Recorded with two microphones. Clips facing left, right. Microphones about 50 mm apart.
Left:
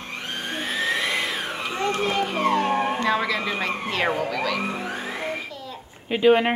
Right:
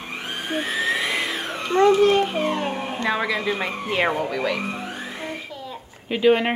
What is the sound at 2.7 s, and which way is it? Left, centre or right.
Police car, left.